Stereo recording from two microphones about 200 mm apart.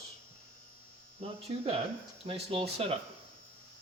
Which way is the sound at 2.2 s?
30° right (ahead or behind).